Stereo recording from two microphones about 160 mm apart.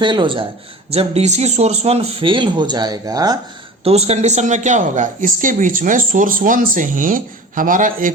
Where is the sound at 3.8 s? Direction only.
40° right (ahead or behind).